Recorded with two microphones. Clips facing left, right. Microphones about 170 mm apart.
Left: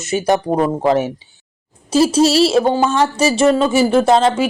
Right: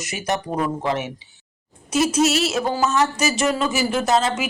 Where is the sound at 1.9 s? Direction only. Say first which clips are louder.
Left 6 dB; 30° left (ahead or behind).